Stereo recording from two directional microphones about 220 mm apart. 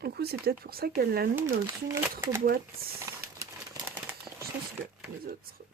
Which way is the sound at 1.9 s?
10° right (ahead or behind).